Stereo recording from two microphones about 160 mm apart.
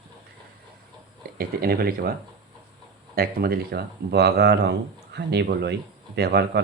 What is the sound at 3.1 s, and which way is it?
Speech, 70° right (ahead or behind).